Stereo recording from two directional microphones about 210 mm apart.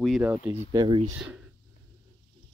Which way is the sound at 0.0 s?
5° right (ahead or behind).